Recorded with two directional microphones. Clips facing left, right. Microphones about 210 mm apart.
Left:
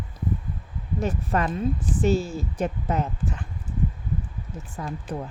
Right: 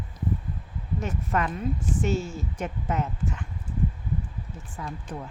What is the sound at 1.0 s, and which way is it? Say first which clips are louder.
Speech: left 3 dB; 35° left (ahead or behind).